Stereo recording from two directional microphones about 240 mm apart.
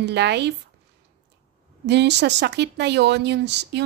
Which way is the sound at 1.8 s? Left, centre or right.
Right.